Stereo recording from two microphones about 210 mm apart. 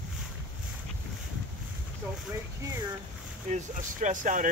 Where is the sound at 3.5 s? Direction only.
35° right (ahead or behind).